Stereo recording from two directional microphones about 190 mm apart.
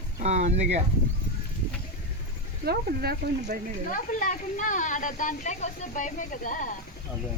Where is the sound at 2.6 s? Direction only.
55° right (ahead or behind).